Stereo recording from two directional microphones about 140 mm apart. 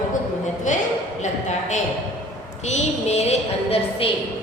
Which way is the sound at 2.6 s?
50° left (ahead or behind).